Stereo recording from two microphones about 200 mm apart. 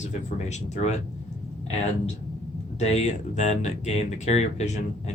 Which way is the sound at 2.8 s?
35° left (ahead or behind).